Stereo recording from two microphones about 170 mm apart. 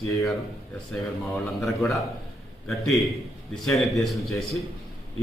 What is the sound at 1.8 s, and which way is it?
Speech, 20° left (ahead or behind).